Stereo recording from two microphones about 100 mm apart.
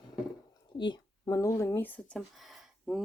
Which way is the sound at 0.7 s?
50° left (ahead or behind).